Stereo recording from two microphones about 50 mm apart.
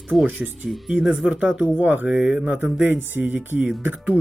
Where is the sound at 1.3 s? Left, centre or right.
Right.